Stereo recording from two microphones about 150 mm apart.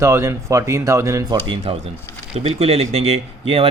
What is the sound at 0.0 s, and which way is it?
Speech, 20° right (ahead or behind).